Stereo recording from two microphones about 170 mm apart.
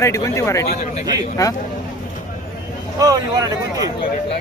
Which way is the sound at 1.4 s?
20° left (ahead or behind).